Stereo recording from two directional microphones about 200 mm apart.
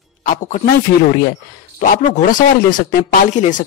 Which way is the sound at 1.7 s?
40° left (ahead or behind).